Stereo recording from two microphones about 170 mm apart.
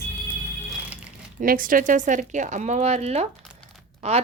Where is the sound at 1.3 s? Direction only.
55° right (ahead or behind).